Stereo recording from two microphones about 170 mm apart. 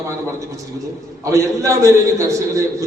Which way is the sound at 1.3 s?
20° right (ahead or behind).